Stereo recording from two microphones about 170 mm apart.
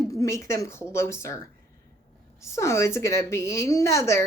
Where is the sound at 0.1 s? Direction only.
20° left (ahead or behind).